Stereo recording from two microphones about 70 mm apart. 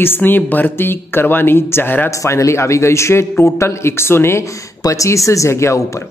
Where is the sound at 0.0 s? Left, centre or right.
Left.